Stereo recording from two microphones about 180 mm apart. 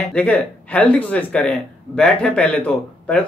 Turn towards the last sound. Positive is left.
turn(degrees=5)  # may be behind; listen again after turning